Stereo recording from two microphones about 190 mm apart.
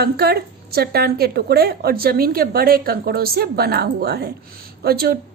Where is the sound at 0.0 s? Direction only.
55° right (ahead or behind).